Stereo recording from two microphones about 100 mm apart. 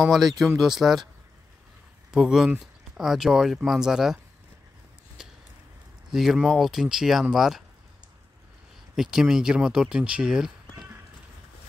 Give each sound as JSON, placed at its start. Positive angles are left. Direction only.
{"t": 0.0, "sound": "speech", "side_deg": 0}
{"t": 2.0, "sound": "speech", "side_deg": -5}
{"t": 6.1, "sound": "speech", "side_deg": -5}
{"t": 8.9, "sound": "speech", "side_deg": -5}